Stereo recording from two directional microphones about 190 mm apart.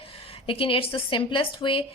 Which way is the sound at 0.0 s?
30° left (ahead or behind).